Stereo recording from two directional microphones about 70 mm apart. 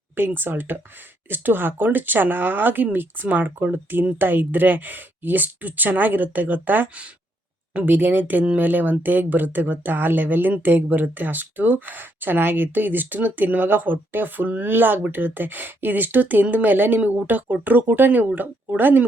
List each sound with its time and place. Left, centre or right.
0.2 s speech: right
18.3 s speech: centre
18.8 s speech: right